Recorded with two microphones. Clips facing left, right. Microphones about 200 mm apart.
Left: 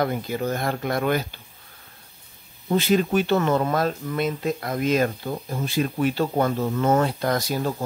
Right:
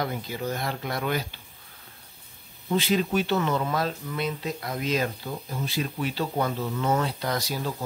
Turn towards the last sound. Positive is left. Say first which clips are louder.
# left 5 dB
turn(degrees=50)  # may be behind; listen again after turning